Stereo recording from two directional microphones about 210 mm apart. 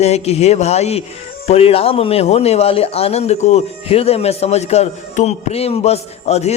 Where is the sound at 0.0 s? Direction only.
30° left (ahead or behind).